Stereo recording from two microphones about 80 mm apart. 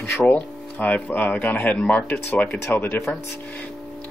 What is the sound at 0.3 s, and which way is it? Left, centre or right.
Speech, centre.